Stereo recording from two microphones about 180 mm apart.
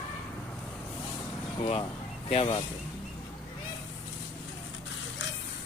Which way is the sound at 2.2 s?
30° left (ahead or behind).